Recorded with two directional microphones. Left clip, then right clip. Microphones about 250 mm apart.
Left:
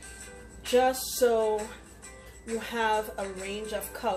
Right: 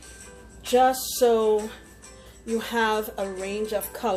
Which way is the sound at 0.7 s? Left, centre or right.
Right.